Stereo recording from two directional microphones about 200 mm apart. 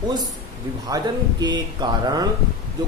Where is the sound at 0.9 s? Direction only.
20° right (ahead or behind).